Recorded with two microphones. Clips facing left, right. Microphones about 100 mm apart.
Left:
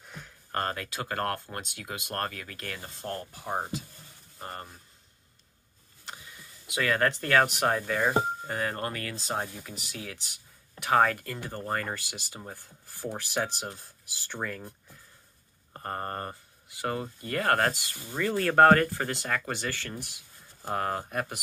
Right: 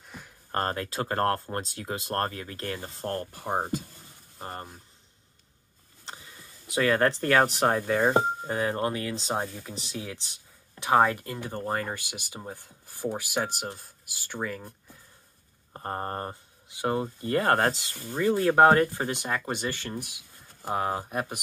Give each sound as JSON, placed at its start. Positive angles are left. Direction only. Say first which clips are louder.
{"t": 0.5, "sound": "speech", "louder": "right 3 dB", "side_deg": -30}
{"t": 3.4, "sound": "speech", "louder": "right 3 dB", "side_deg": -25}
{"t": 6.7, "sound": "speech", "louder": "right 3 dB", "side_deg": -30}
{"t": 13.1, "sound": "speech", "louder": "even", "side_deg": -5}
{"t": 15.7, "sound": "speech", "louder": "right 2 dB", "side_deg": -20}